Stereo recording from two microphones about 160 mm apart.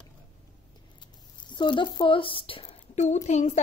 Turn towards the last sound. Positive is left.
turn(degrees=45)  # may be behind; listen again after turning